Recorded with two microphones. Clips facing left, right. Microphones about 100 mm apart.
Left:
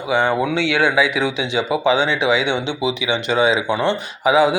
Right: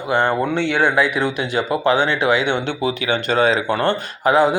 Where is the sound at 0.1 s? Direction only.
Centre (ahead or behind).